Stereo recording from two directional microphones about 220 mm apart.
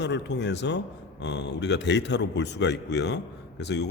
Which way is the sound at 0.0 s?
50° left (ahead or behind).